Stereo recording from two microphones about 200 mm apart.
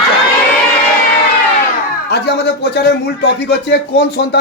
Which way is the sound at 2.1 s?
55° left (ahead or behind).